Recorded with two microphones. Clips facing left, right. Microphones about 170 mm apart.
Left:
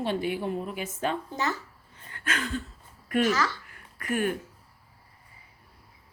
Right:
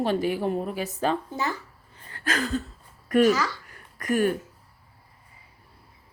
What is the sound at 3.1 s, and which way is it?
Speech, 40° right (ahead or behind).